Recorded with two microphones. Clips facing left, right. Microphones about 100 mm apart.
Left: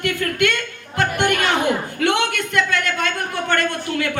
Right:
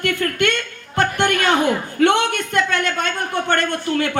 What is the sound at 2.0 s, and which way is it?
A woman's voice, 35° right (ahead or behind).